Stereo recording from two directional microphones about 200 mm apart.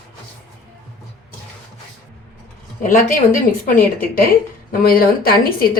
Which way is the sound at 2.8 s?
40° left (ahead or behind).